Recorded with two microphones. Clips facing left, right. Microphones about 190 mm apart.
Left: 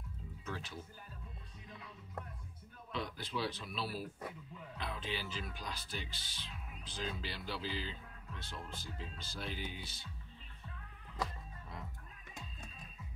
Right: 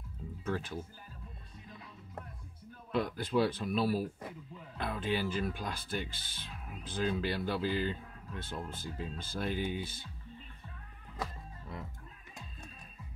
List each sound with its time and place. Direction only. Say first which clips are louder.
0.5 s speech: right 9 dB; 50° right (ahead or behind)
2.9 s speech: right 9 dB; 50° right (ahead or behind)